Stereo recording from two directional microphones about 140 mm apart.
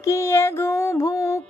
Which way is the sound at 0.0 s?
20° left (ahead or behind).